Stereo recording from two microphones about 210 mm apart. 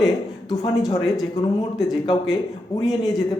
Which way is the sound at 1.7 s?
Centre (ahead or behind).